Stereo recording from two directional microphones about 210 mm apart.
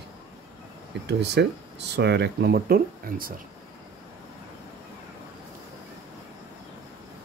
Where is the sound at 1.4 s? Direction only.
50° right (ahead or behind).